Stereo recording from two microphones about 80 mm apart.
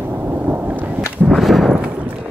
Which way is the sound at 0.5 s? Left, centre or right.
Centre.